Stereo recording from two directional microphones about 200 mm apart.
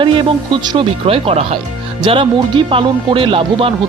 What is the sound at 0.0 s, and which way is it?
Speech, 25° right (ahead or behind).